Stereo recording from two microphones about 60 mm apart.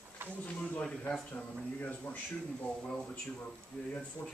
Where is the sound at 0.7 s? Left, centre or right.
Centre.